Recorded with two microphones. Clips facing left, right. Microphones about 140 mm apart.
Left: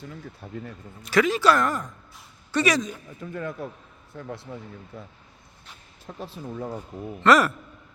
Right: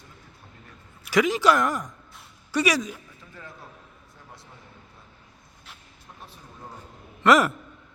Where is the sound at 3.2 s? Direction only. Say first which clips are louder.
Left 13 dB; 60° left (ahead or behind).